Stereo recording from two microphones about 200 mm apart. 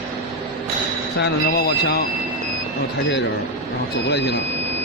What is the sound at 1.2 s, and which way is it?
Speech, 55° left (ahead or behind).